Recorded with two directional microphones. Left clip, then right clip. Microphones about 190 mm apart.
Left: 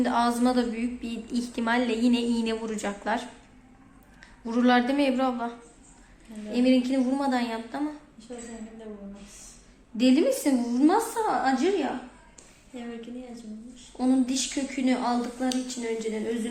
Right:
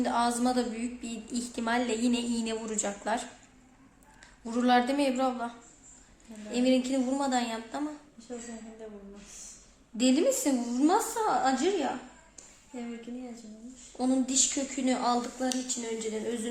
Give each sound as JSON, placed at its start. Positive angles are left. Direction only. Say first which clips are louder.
{"t": 0.0, "sound": "a woman's voice", "louder": "left 3 dB", "side_deg": -10}
{"t": 4.4, "sound": "a woman's voice", "louder": "left 2 dB", "side_deg": -10}
{"t": 10.0, "sound": "speech", "louder": "left 3 dB", "side_deg": -15}
{"t": 14.0, "sound": "speech", "louder": "left 2 dB", "side_deg": -25}